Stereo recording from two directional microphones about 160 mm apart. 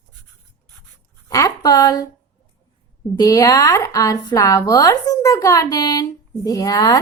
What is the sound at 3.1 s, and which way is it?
A woman's voice, 20° left (ahead or behind).